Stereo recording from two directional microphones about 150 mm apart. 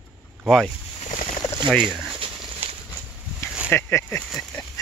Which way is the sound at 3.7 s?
15° left (ahead or behind).